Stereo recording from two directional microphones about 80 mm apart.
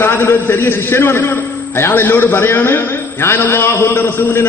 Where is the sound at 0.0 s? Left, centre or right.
Left.